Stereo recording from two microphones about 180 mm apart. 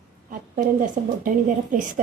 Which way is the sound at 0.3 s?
50° right (ahead or behind).